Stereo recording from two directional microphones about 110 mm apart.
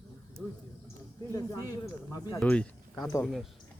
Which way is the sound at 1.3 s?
30° left (ahead or behind).